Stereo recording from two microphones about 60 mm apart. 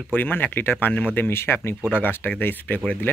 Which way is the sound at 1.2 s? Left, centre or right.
Left.